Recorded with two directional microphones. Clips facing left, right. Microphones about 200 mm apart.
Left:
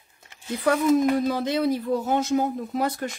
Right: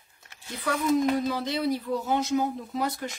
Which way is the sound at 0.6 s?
45° left (ahead or behind).